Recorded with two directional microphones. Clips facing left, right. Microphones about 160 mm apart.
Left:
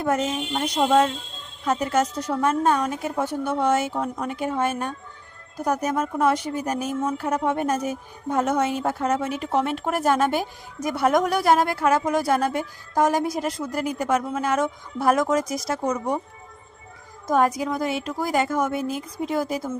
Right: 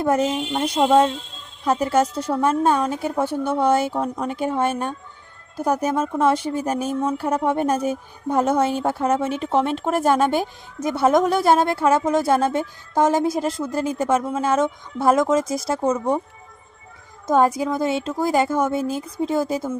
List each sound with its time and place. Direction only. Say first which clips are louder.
0.0 s a woman's voice: right 4 dB; 30° right (ahead or behind)
17.2 s a woman's voice: right 3 dB; 25° right (ahead or behind)